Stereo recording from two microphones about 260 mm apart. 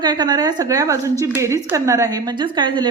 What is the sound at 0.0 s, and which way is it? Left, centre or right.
A woman's voice, centre.